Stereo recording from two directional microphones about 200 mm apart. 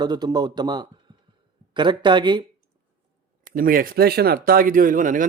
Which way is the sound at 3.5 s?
45° right (ahead or behind).